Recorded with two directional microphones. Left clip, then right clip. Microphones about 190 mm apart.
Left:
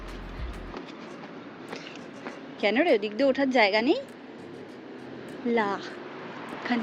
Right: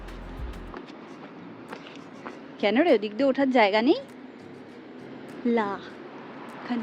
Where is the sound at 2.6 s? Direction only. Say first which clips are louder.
Right 2 dB; 20° right (ahead or behind).